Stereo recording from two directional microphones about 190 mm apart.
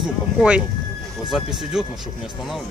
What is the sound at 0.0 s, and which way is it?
Speech, 5° right (ahead or behind).